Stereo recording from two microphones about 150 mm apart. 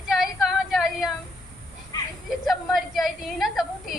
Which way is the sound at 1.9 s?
25° left (ahead or behind).